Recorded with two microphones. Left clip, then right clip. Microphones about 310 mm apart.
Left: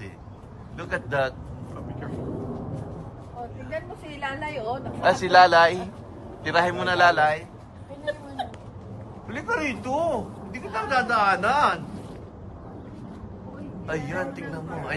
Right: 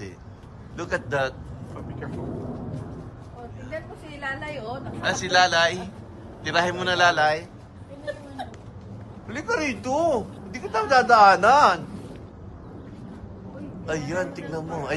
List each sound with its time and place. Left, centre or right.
0.7 s a man's voice: centre
4.2 s a sound: left
5.2 s a man's voice: centre
9.3 s a man's voice: centre
13.8 s a man's voice: centre